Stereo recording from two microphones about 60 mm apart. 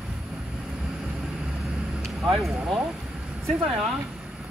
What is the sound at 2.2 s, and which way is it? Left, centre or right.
Vehicle, centre.